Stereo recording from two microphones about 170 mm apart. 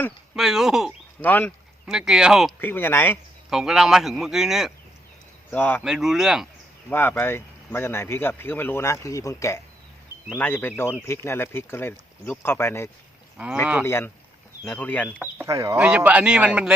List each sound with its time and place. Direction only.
0.3 s a man's voice: centre (ahead or behind)
1.2 s speech: 10° left (ahead or behind)
1.9 s a man's voice: 5° right (ahead or behind)
2.6 s speech: 10° left (ahead or behind)
3.5 s a man's voice: 5° right (ahead or behind)
5.5 s speech: 10° left (ahead or behind)
5.8 s a man's voice: 5° right (ahead or behind)
6.9 s speech: 10° left (ahead or behind)
13.3 s speech: 5° right (ahead or behind)
13.8 s speech: 15° left (ahead or behind)
15.4 s speech: 20° right (ahead or behind)
15.8 s speech: 10° right (ahead or behind)